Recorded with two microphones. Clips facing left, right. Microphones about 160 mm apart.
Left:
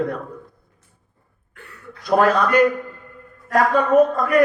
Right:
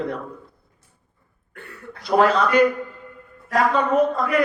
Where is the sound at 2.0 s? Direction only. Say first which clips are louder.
Left 1 dB; 50° left (ahead or behind).